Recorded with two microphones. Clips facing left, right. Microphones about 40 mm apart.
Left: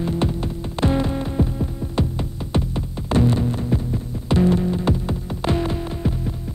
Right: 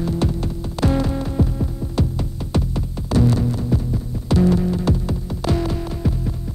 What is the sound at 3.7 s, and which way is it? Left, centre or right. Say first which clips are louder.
Throbbing: right 1 dB; left.